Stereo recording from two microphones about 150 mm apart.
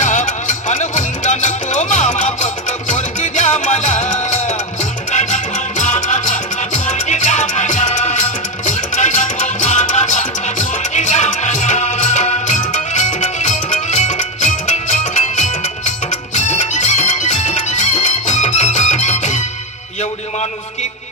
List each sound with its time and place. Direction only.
0.0 s music: 55° left (ahead or behind)